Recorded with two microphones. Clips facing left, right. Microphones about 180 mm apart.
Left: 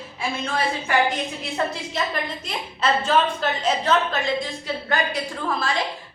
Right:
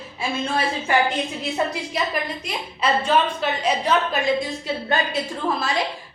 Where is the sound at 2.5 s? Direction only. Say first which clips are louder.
Even; 10° right (ahead or behind).